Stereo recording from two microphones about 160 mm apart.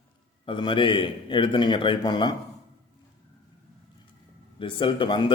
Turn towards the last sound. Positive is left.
turn(degrees=30)  # may be behind; listen again after turning